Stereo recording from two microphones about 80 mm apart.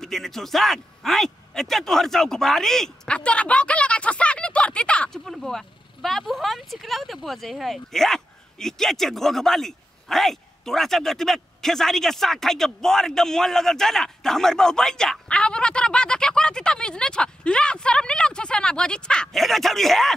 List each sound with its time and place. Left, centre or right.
0.0 s speech: centre
5.2 s speech: centre